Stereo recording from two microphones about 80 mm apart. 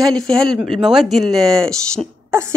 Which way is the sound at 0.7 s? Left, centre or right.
Centre.